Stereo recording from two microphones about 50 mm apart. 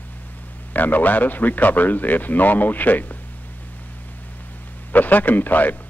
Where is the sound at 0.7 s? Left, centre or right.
Left.